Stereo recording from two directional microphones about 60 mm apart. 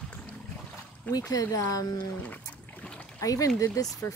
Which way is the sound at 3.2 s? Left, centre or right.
Left.